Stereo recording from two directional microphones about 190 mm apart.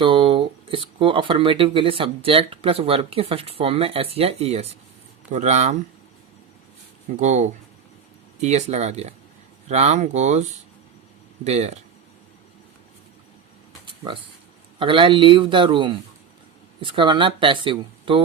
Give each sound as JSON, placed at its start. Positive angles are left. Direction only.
{"t": 0.0, "sound": "speech", "side_deg": -25}
{"t": 7.2, "sound": "speech", "side_deg": -35}
{"t": 11.4, "sound": "speech", "side_deg": -35}
{"t": 13.8, "sound": "a sound", "side_deg": -25}
{"t": 14.8, "sound": "speech", "side_deg": -25}